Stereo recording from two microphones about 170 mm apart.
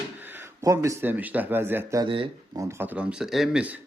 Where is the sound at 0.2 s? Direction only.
10° right (ahead or behind).